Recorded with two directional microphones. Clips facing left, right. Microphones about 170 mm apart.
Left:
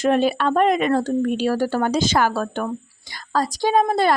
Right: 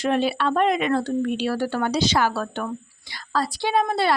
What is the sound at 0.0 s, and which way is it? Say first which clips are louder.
A woman's voice: left 4 dB; 45° left (ahead or behind).